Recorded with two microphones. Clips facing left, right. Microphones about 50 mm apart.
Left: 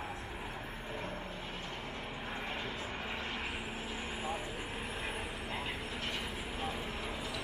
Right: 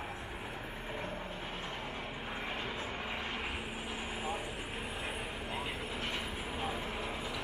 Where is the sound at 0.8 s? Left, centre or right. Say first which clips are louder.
Right 1 dB; centre.